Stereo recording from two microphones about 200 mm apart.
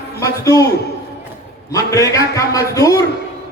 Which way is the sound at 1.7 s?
15° left (ahead or behind).